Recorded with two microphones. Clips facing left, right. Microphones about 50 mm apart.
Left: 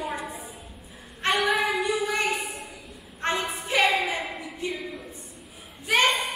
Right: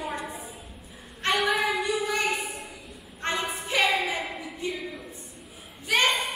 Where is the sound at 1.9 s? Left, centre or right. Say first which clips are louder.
Left 1 dB; centre.